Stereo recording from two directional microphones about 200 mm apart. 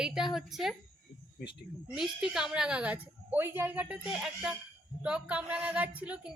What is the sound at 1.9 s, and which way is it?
A woman's voice, centre (ahead or behind).